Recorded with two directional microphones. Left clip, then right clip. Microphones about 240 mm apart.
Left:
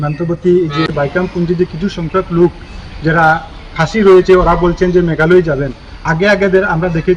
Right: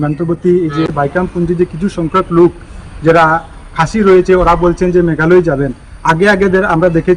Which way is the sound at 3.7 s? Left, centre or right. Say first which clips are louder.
Left 1 dB; centre.